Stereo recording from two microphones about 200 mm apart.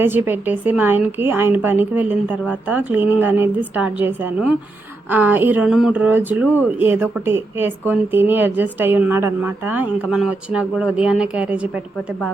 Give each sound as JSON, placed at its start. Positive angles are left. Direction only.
{"t": 0.0, "sound": "speech", "side_deg": -10}